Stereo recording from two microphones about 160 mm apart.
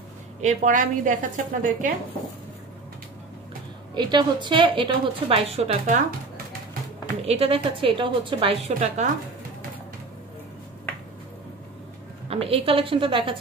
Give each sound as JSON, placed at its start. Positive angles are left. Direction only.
{"t": 0.4, "sound": "a woman's voice", "side_deg": -50}
{"t": 3.9, "sound": "a woman's voice", "side_deg": -30}
{"t": 7.2, "sound": "a woman's voice", "side_deg": -40}
{"t": 12.3, "sound": "a woman's voice", "side_deg": -35}